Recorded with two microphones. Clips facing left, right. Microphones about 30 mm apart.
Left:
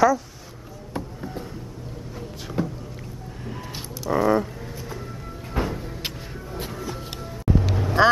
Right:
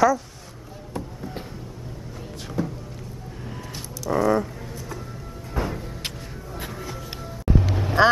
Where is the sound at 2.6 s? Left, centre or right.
Left.